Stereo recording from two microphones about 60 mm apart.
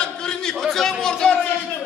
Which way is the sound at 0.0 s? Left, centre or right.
Centre.